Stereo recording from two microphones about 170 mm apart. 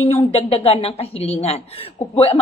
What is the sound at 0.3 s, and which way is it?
A woman's voice, 35° left (ahead or behind).